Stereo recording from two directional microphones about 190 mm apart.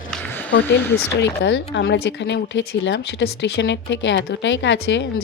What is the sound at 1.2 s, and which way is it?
Speech, 70° left (ahead or behind).